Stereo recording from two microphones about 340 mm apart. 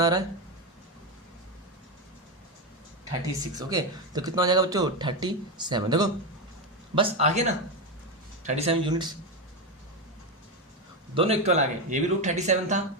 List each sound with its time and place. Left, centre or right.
0.0 s speech: centre
3.5 s speech: centre
11.1 s speech: centre